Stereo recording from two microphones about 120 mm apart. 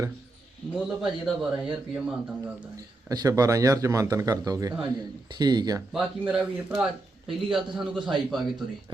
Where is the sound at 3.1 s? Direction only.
30° right (ahead or behind).